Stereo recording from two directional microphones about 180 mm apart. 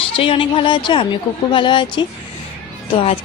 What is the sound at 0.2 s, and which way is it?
A woman's voice, 30° left (ahead or behind).